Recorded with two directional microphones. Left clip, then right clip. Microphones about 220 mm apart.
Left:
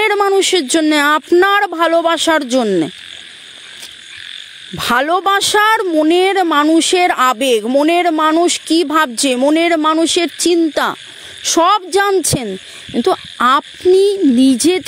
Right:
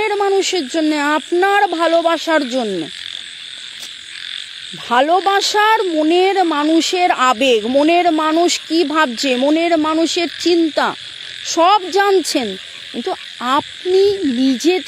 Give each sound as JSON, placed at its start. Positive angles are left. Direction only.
{"t": 0.0, "sound": "speech", "side_deg": 40}
{"t": 4.7, "sound": "speech", "side_deg": 40}